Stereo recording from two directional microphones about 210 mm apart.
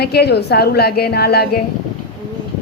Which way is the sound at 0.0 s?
50° left (ahead or behind).